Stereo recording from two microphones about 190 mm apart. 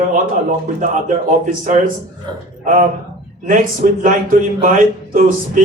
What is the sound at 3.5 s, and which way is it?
A man's voice, 45° right (ahead or behind).